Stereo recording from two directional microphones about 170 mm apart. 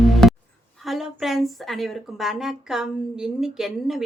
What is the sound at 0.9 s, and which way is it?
Speech, centre (ahead or behind).